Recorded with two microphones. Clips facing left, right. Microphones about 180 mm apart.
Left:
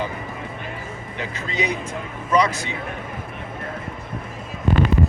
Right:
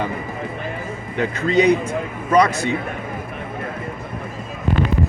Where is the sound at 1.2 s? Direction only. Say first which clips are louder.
Right 10 dB; 55° right (ahead or behind).